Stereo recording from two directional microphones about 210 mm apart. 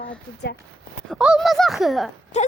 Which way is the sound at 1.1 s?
Centre (ahead or behind).